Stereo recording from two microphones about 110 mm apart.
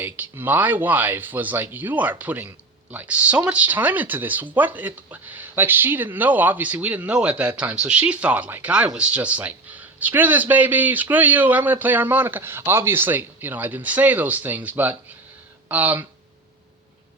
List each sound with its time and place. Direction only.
0.0 s speech: 15° right (ahead or behind)